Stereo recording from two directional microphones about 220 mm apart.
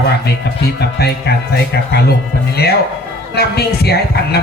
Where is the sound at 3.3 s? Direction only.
45° left (ahead or behind).